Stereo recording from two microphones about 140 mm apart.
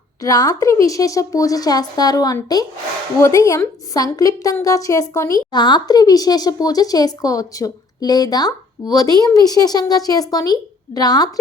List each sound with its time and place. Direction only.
0.2 s speech: 25° left (ahead or behind)